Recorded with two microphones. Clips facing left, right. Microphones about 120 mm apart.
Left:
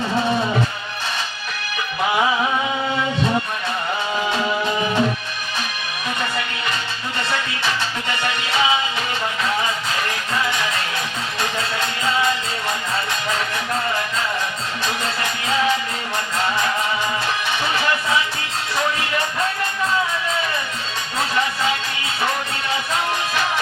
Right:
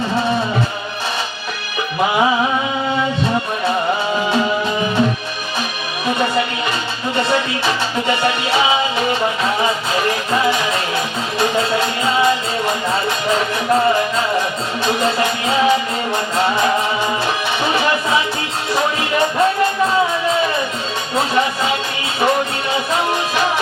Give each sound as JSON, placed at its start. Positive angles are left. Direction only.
{"t": 6.1, "sound": "music", "side_deg": -20}
{"t": 21.2, "sound": "music", "side_deg": -20}